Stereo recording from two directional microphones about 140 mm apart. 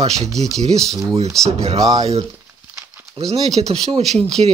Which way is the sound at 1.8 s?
25° right (ahead or behind).